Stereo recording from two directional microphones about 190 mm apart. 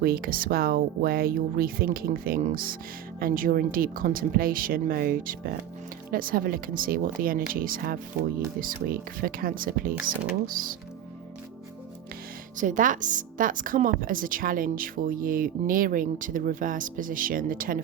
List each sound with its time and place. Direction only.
0.0 s a woman's voice: 50° right (ahead or behind)
12.5 s a woman's voice: 45° right (ahead or behind)